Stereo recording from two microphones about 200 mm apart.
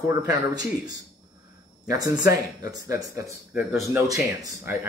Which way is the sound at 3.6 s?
5° right (ahead or behind).